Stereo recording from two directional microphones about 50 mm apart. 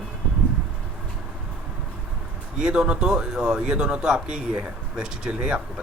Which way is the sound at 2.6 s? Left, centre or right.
Centre.